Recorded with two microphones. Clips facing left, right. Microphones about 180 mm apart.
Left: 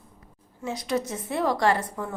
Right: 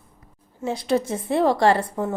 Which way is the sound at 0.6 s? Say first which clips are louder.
Right 5 dB; 30° right (ahead or behind).